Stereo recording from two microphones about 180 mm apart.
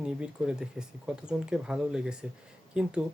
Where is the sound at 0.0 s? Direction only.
5° right (ahead or behind).